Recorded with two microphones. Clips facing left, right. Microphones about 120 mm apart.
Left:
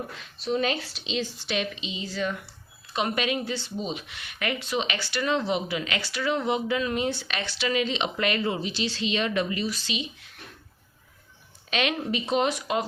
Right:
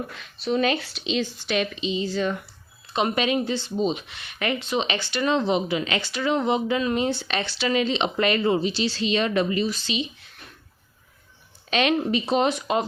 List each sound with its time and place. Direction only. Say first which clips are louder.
0.1 s a woman's voice: right 3 dB; 65° right (ahead or behind)
1.8 s speech: right 6 dB; 35° right (ahead or behind)
11.7 s speech: right 5 dB; 35° right (ahead or behind)